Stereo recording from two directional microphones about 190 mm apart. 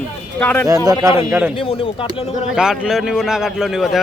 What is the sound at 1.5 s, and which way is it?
Speech, 30° left (ahead or behind).